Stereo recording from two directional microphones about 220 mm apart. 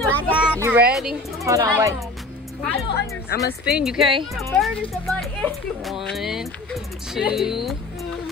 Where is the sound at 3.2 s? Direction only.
45° left (ahead or behind).